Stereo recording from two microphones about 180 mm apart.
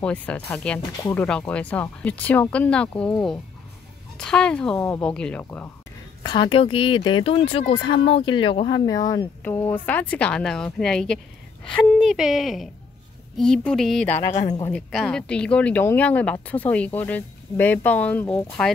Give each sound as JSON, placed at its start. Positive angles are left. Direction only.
{"t": 0.0, "sound": "speech", "side_deg": 5}
{"t": 6.2, "sound": "speech", "side_deg": 25}